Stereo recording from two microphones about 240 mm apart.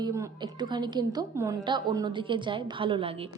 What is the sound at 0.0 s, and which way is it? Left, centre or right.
A woman's voice, centre.